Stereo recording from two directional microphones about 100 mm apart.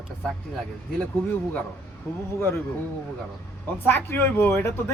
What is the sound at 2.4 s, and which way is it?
Speech, 20° left (ahead or behind).